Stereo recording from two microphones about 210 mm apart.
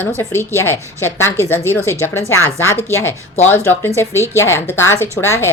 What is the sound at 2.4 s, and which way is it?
Speech, 10° left (ahead or behind).